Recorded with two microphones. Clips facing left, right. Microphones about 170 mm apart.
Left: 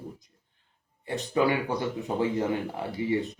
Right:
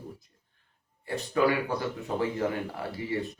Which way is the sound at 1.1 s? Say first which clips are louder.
Even; 20° left (ahead or behind).